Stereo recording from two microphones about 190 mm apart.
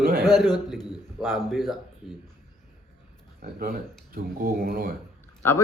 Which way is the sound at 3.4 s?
50° right (ahead or behind).